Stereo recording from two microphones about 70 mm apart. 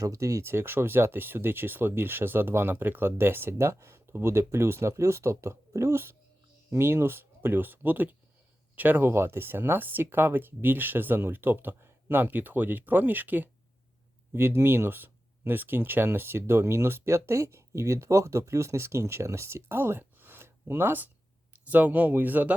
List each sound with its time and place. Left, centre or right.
0.0 s speech: right
0.5 s speech: right